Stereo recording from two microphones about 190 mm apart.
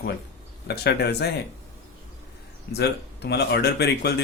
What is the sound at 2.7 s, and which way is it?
Speech, 60° left (ahead or behind).